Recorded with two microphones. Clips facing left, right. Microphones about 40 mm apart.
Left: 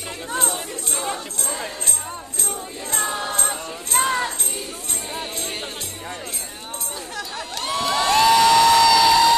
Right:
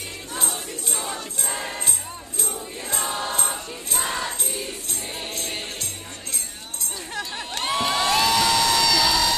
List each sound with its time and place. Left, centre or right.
0.4 s music: centre
3.3 s music: centre
4.0 s music: left
7.2 s crowd: right
7.9 s music: centre